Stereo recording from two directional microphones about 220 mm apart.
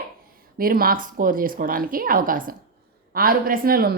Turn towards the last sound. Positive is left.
turn(degrees=-40)  # may be behind; listen again after turning